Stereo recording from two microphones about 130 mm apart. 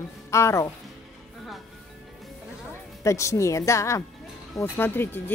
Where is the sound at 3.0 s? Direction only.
25° left (ahead or behind).